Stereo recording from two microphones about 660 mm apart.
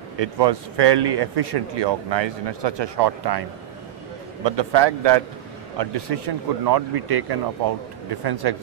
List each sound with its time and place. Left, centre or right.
0.2 s speech: right
4.5 s speech: right